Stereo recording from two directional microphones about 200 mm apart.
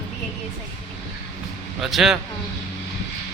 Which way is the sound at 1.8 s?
Centre (ahead or behind).